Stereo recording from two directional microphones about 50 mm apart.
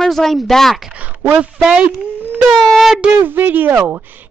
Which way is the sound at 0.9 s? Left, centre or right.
Right.